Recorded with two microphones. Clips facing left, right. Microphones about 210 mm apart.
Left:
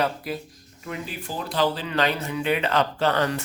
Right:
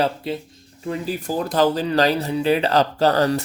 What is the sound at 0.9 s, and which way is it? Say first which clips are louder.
Speech: right 8 dB; 40° right (ahead or behind).